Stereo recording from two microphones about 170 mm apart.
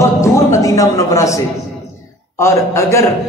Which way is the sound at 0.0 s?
15° left (ahead or behind).